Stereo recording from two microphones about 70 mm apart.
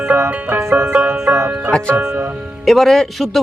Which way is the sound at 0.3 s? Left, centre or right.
Right.